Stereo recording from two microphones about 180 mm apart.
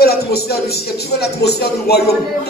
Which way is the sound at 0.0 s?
60° left (ahead or behind).